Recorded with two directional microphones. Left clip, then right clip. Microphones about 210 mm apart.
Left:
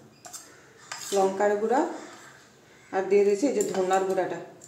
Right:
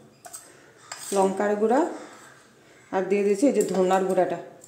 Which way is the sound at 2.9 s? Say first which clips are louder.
Left 1 dB; 40° right (ahead or behind).